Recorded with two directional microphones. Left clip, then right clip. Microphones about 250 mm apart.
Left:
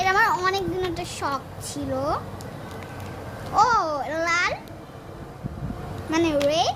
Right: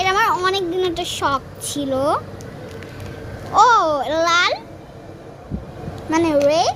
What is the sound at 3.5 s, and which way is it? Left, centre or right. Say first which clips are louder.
A child's voice: right 7 dB; centre.